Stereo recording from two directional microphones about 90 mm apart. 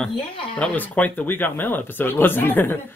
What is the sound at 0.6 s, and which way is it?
Speech, 15° left (ahead or behind).